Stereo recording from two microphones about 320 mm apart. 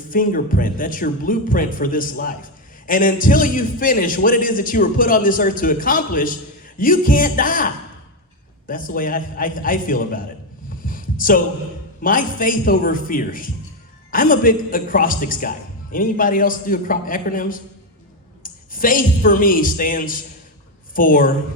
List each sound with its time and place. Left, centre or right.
0.1 s speech: left
10.8 s a sound: left
12.0 s speech: left